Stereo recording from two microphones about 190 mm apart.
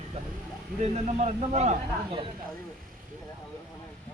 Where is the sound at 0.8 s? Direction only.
35° right (ahead or behind).